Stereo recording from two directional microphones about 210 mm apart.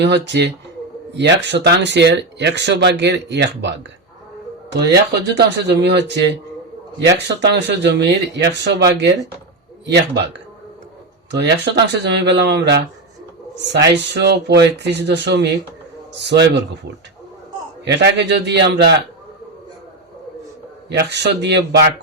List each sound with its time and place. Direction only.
0.0 s speech: 55° right (ahead or behind)
17.8 s speech: 55° right (ahead or behind)
20.9 s speech: 55° right (ahead or behind)